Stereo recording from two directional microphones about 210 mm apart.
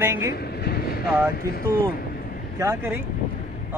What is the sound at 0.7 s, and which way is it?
Vehicle, 50° left (ahead or behind).